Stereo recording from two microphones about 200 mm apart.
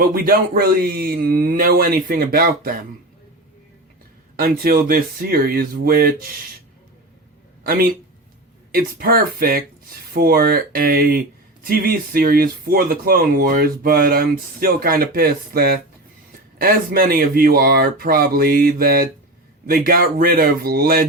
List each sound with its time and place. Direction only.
0.0 s speech: 45° right (ahead or behind)
4.4 s speech: 45° right (ahead or behind)
7.7 s speech: 50° right (ahead or behind)